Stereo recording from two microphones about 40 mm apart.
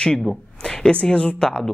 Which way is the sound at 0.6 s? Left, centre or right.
Centre.